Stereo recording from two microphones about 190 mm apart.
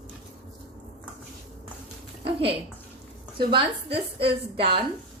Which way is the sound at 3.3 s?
30° right (ahead or behind).